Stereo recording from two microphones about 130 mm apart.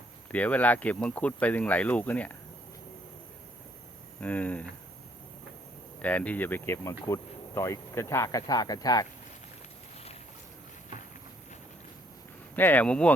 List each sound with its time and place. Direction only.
0.3 s speech: 10° left (ahead or behind)
4.2 s speech: 10° left (ahead or behind)
6.0 s speech: 10° left (ahead or behind); by 9.0 s 30° left (ahead or behind)
12.5 s speech: 15° left (ahead or behind)